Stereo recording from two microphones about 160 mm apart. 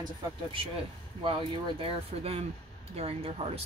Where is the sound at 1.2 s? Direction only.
30° right (ahead or behind).